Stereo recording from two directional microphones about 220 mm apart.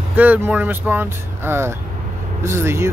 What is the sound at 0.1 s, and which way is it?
Speech, 10° right (ahead or behind).